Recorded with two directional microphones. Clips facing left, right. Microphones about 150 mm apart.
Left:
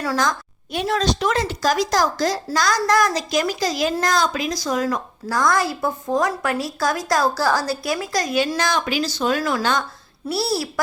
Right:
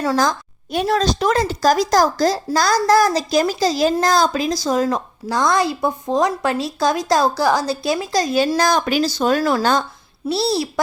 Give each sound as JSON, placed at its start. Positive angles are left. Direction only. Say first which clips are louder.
{"t": 0.0, "sound": "a woman's voice", "louder": "right 4 dB", "side_deg": -30}